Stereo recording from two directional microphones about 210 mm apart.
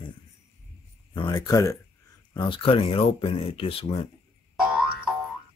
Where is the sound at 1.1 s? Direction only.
20° left (ahead or behind).